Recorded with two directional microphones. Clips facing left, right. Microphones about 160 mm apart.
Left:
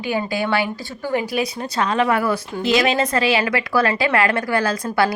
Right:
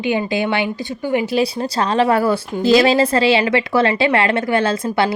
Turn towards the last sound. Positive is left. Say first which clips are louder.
# right 2 dB
turn(degrees=-25)  # may be behind; listen again after turning